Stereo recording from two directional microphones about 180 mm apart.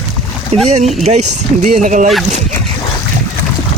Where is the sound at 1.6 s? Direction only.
45° right (ahead or behind).